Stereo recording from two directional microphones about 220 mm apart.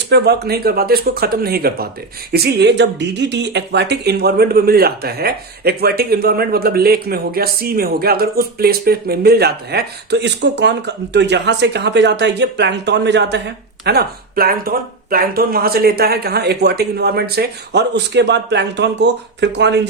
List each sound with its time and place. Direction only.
0.1 s speech: 45° right (ahead or behind)